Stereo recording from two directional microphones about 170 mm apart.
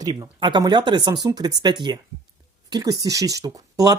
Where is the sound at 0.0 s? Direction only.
25° right (ahead or behind).